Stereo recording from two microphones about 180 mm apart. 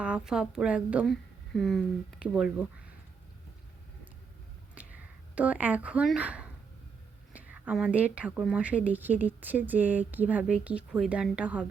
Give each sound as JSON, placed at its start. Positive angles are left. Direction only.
{"t": 0.0, "sound": "a woman's voice", "side_deg": -5}
{"t": 4.7, "sound": "a sound", "side_deg": -10}
{"t": 7.3, "sound": "speech", "side_deg": -10}